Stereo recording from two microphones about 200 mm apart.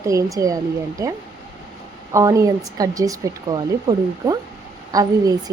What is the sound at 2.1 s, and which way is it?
A woman's voice, 15° right (ahead or behind).